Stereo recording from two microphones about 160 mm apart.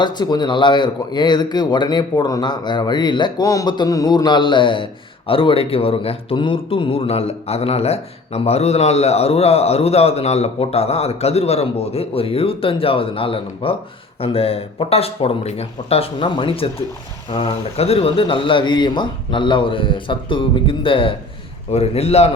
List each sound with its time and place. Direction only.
0.0 s speech: 25° left (ahead or behind)